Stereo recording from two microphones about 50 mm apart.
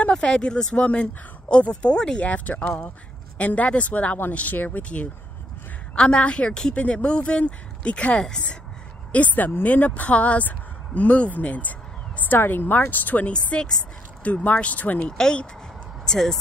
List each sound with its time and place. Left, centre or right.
0.3 s speech: centre
2.2 s speech: left
9.1 s speech: left
13.5 s speech: left
15.0 s speech: centre